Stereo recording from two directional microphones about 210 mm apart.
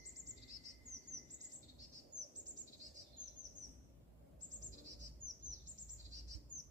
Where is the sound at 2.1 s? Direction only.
55° right (ahead or behind).